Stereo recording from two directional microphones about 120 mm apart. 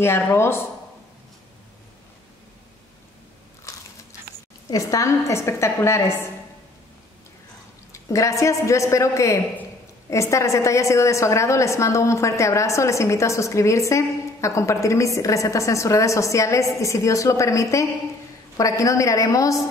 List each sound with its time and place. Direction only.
0.0 s a woman's voice: 20° left (ahead or behind)
4.6 s a woman's voice: 30° left (ahead or behind)
7.9 s a woman's voice: 25° left (ahead or behind)